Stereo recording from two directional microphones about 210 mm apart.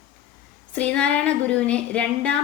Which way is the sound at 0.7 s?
5° left (ahead or behind).